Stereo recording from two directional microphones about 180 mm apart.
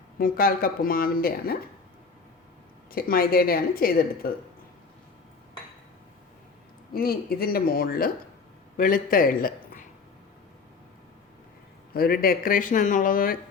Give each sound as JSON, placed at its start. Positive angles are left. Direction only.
{"t": 0.2, "sound": "speech", "side_deg": 55}
{"t": 2.9, "sound": "speech", "side_deg": 55}
{"t": 6.9, "sound": "a man's voice", "side_deg": 55}
{"t": 11.9, "sound": "speech", "side_deg": 55}